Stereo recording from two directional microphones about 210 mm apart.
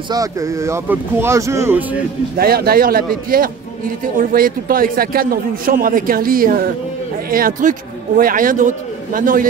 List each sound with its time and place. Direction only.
0.1 s speech: 15° right (ahead or behind)
2.3 s a man's voice: 45° right (ahead or behind)